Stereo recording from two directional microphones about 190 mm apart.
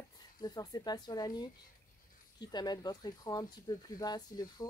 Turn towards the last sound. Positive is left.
turn(degrees=20)  # may be behind; listen again after turning